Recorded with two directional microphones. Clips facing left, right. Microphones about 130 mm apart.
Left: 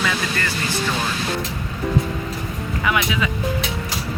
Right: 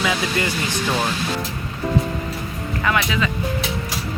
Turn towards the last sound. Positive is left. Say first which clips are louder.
# even
turn(degrees=10)  # may be behind; listen again after turning